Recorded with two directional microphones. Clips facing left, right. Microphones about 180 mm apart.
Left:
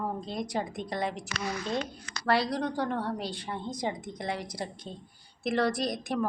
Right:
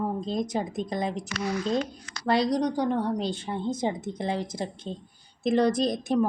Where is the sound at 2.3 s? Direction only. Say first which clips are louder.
Right 4 dB; 20° right (ahead or behind).